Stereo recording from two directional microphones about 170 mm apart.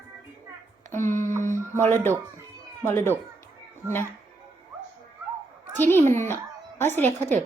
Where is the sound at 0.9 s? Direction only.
15° left (ahead or behind).